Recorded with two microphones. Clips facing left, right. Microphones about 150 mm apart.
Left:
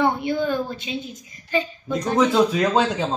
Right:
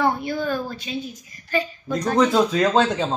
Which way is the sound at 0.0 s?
20° left (ahead or behind).